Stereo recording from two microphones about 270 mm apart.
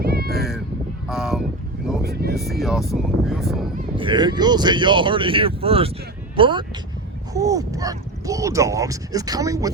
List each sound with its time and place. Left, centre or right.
0.0 s cat: right
1.0 s a sound: centre
2.0 s vehicle: right
2.4 s speech: centre
3.9 s speech: centre